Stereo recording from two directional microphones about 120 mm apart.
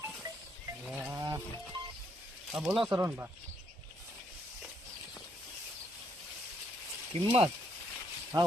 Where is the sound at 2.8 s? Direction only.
25° right (ahead or behind).